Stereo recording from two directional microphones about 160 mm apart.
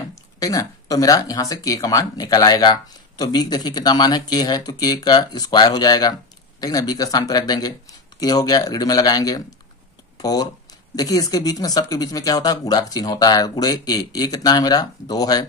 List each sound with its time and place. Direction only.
0.1 s speech: 20° left (ahead or behind)